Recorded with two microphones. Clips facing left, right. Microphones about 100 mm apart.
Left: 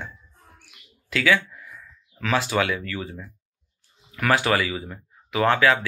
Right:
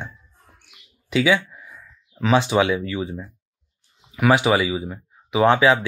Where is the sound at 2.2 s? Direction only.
20° right (ahead or behind).